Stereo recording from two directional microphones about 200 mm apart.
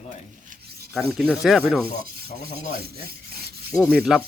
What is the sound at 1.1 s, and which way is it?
Speech, centre (ahead or behind).